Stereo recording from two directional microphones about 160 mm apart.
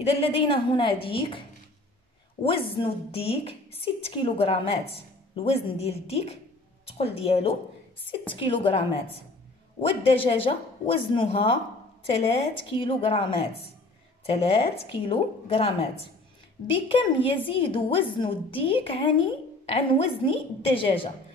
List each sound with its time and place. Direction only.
0.0 s a woman's voice: 35° left (ahead or behind)
2.4 s a woman's voice: 35° left (ahead or behind)